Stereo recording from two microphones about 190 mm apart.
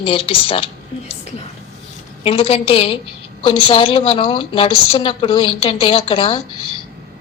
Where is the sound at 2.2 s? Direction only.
30° left (ahead or behind).